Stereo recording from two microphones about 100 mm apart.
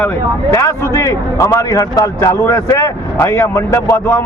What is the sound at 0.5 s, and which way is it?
A man's voice, 30° left (ahead or behind).